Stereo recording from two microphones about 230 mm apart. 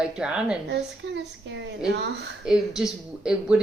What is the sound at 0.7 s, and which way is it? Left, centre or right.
A woman's voice, right.